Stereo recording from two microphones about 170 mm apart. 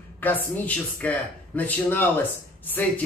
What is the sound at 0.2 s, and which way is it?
Speech, 10° left (ahead or behind).